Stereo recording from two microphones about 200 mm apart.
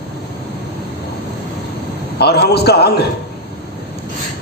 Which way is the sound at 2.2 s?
55° left (ahead or behind).